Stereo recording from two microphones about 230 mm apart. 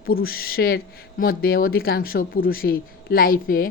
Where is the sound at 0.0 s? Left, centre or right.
Left.